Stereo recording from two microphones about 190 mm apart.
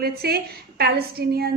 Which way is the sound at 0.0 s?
55° right (ahead or behind).